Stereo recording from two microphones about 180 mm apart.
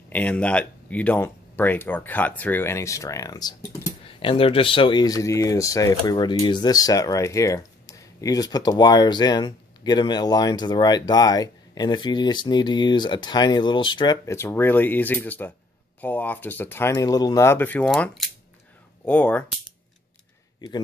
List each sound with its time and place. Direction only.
0.1 s speech: 10° left (ahead or behind)